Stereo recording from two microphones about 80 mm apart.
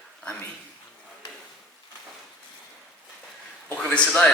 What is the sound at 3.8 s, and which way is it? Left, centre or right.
Speech, centre.